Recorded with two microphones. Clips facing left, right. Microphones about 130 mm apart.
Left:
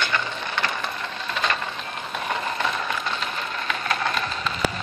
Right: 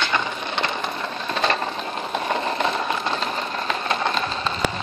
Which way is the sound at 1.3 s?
35° right (ahead or behind).